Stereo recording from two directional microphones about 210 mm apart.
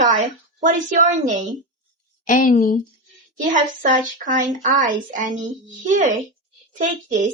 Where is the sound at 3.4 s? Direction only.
40° right (ahead or behind).